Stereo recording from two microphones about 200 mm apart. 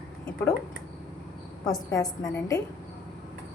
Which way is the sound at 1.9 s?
20° left (ahead or behind).